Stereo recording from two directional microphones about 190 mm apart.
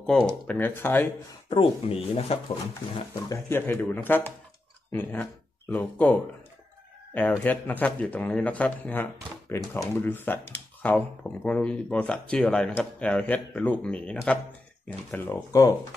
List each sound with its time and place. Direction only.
0.0 s speech: 5° left (ahead or behind)
1.5 s speech: 30° left (ahead or behind)
3.3 s speech: 10° left (ahead or behind)